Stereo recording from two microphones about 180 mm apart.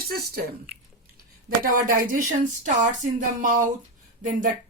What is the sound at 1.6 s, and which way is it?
Speech, 50° right (ahead or behind).